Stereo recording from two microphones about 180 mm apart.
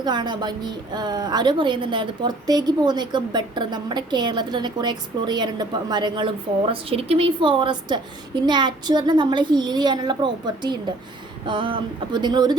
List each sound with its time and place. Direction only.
0.0 s a woman's voice: 25° right (ahead or behind)